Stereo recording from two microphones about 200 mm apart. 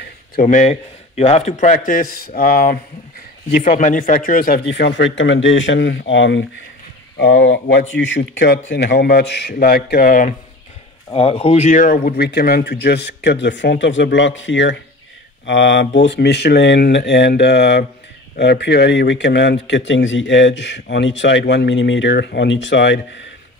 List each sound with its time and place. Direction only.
0.0 s a man's voice: 40° left (ahead or behind)
11.1 s speech: 30° left (ahead or behind); by 23.2 s 60° left (ahead or behind)